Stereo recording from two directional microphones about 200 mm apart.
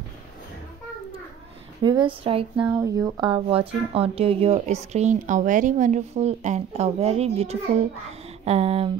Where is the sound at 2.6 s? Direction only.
15° right (ahead or behind); by 8.9 s 30° right (ahead or behind).